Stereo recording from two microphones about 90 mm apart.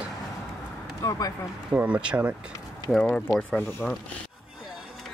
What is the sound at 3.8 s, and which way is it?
Speech, 15° left (ahead or behind).